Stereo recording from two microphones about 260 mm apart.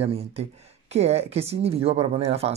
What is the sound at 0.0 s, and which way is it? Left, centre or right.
Speech, right.